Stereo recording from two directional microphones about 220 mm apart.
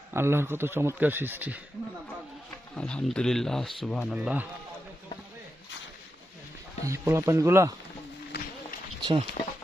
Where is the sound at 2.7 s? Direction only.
5° left (ahead or behind).